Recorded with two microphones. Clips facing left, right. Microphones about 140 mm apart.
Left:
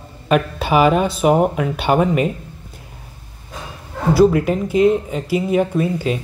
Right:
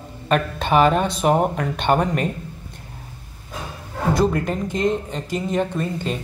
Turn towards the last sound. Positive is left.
turn(degrees=5)  # may be behind; listen again after turning